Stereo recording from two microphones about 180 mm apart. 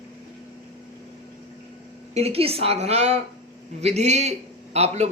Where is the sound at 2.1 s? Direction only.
35° right (ahead or behind).